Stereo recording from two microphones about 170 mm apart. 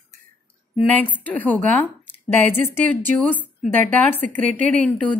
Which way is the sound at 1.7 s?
10° left (ahead or behind).